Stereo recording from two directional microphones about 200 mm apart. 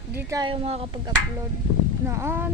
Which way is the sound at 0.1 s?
15° right (ahead or behind).